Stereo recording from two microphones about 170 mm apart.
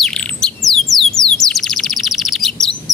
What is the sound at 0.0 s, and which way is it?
Bird, 5° left (ahead or behind).